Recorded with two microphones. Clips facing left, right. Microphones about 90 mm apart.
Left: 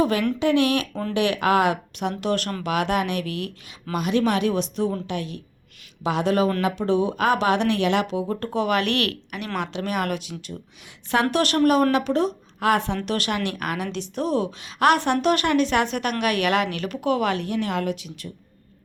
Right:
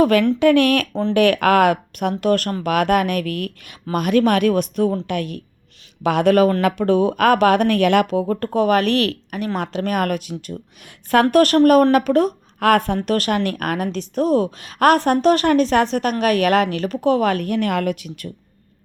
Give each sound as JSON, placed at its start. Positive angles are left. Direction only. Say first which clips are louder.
{"t": 0.0, "sound": "a man's voice", "louder": "right 7 dB", "side_deg": -60}